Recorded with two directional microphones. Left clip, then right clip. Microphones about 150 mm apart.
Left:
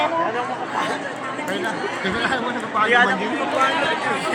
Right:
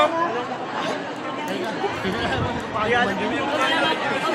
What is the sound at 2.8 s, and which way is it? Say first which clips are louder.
Speech: left 5 dB; 45° left (ahead or behind).